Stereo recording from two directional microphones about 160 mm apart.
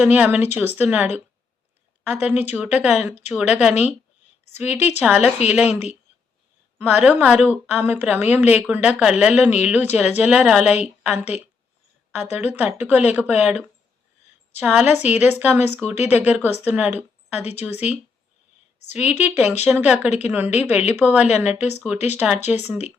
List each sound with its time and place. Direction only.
0.0 s a woman's voice: 10° right (ahead or behind)
2.4 s a woman's voice: 10° right (ahead or behind)
6.7 s a woman's voice: 10° right (ahead or behind)
17.0 s a sound: 10° right (ahead or behind)
17.6 s a woman's voice: 10° right (ahead or behind)
18.9 s a woman's voice: 10° right (ahead or behind)
21.9 s speech: 45° left (ahead or behind)
22.4 s a woman's voice: 10° right (ahead or behind)